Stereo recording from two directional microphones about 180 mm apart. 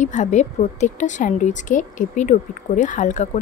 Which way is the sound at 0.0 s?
40° left (ahead or behind).